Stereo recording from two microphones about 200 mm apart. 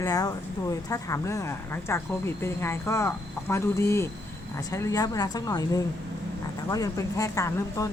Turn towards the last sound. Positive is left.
turn(degrees=15)  # may be behind; listen again after turning